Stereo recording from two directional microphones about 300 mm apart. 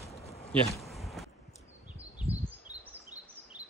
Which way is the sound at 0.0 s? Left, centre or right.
Centre.